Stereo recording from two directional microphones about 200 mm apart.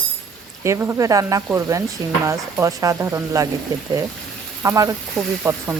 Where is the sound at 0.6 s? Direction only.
10° right (ahead or behind).